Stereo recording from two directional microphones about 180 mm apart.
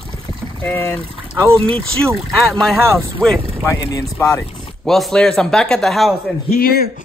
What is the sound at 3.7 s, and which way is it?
Speech, 15° left (ahead or behind).